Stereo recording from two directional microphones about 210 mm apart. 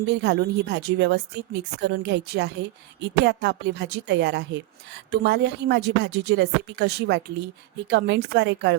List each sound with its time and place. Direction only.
0.1 s a woman's voice: 55° right (ahead or behind)